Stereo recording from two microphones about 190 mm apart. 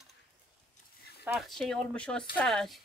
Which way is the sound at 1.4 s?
Centre (ahead or behind).